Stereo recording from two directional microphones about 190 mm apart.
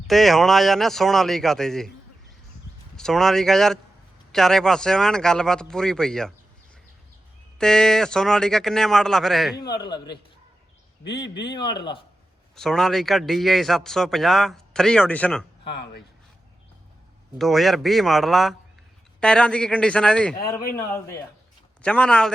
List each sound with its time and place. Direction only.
0.1 s a man's voice: centre (ahead or behind)
2.9 s a man's voice: centre (ahead or behind)
7.6 s a man's voice: 5° left (ahead or behind)
9.6 s a man's voice: 20° left (ahead or behind)
11.5 s a man's voice: 25° left (ahead or behind)
12.5 s a man's voice: centre (ahead or behind)
15.7 s speech: 60° left (ahead or behind)
17.3 s a man's voice: centre (ahead or behind)
21.8 s a man's voice: 5° left (ahead or behind)